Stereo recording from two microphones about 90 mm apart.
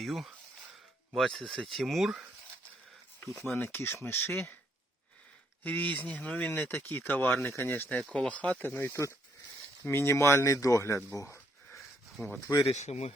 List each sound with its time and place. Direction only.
0.0 s speech: centre (ahead or behind)
3.4 s speech: 25° left (ahead or behind)
5.6 s speech: 20° left (ahead or behind); by 12.3 s 35° left (ahead or behind)
12.9 s speech: 90° left